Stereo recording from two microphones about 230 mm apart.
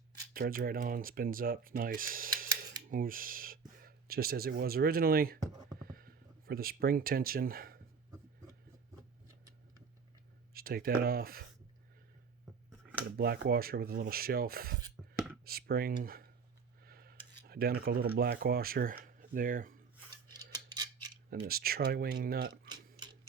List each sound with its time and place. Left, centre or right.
0.3 s speech: right
5.4 s a sound: centre
5.9 s speech: right
10.5 s speech: right
13.1 s speech: right
16.8 s a sound: right
17.4 s speech: right
20.1 s scissors: centre
21.2 s speech: right